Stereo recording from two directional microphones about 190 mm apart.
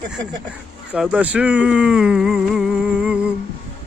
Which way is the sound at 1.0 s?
5° right (ahead or behind).